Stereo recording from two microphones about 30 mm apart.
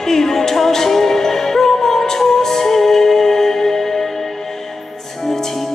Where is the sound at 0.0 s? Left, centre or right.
Centre.